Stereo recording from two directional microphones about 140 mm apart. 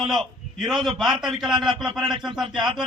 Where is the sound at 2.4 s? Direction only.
35° right (ahead or behind).